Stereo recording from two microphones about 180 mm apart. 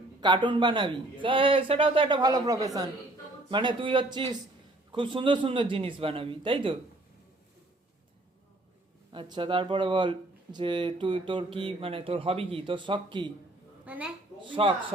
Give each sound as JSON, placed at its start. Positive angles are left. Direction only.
{"t": 0.2, "sound": "speech", "side_deg": -25}
{"t": 9.1, "sound": "speech", "side_deg": -25}
{"t": 13.8, "sound": "a woman's voice", "side_deg": -10}
{"t": 14.5, "sound": "speech", "side_deg": -30}